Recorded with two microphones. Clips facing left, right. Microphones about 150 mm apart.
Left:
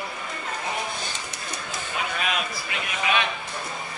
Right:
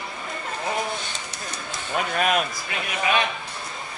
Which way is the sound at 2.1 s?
50° right (ahead or behind).